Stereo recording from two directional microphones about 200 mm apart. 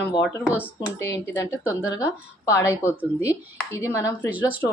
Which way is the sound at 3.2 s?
15° left (ahead or behind).